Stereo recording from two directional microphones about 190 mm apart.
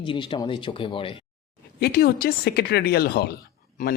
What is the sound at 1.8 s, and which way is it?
Speech, 55° left (ahead or behind).